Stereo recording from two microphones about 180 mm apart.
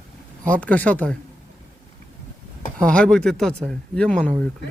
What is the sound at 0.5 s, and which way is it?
Speech, 10° left (ahead or behind).